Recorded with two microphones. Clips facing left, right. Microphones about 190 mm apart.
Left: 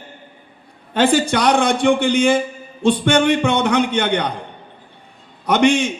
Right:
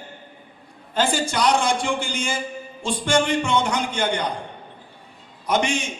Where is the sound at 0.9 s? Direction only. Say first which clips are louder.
Left 7 dB; 60° left (ahead or behind).